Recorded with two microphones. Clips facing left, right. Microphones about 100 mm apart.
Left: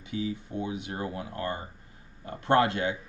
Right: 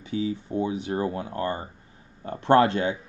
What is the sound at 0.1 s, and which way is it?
Speech, 30° right (ahead or behind).